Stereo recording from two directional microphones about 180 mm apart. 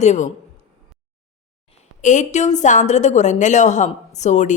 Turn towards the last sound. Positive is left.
turn(degrees=40)  # may be behind; listen again after turning